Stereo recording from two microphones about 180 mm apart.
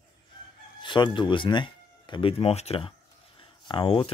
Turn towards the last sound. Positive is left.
turn(degrees=30)  # may be behind; listen again after turning